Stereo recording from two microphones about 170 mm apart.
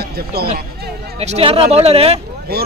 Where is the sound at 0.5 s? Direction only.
70° right (ahead or behind).